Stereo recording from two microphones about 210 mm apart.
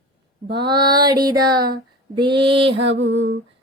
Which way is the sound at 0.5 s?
20° right (ahead or behind).